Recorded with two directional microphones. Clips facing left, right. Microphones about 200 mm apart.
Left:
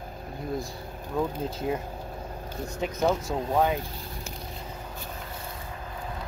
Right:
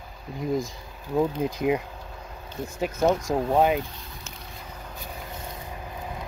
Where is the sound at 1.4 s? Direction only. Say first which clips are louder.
Right 5 dB; 15° right (ahead or behind).